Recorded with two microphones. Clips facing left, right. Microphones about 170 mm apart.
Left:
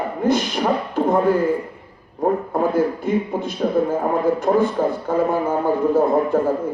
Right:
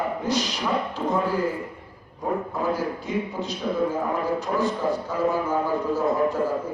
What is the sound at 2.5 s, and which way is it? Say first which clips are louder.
A man's voice: left 7 dB; 55° left (ahead or behind).